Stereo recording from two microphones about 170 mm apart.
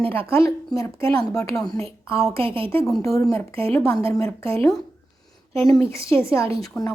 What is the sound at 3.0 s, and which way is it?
Speech, 20° left (ahead or behind).